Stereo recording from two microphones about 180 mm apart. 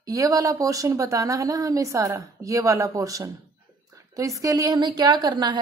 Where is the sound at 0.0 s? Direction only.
20° right (ahead or behind).